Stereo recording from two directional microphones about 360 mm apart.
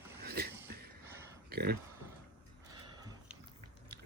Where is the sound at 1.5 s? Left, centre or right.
Right.